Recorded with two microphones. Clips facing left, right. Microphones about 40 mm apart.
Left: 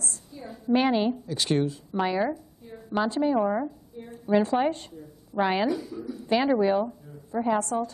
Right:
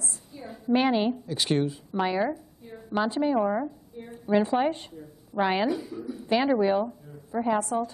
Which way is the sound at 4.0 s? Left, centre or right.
Centre.